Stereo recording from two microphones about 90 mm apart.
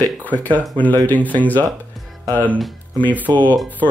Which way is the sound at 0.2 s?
20° left (ahead or behind).